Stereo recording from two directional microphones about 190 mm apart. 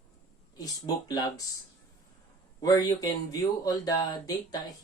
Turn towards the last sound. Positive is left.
turn(degrees=20)  # may be behind; listen again after turning